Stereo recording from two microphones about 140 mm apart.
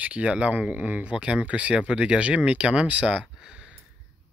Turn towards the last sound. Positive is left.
turn(degrees=-5)  # may be behind; listen again after turning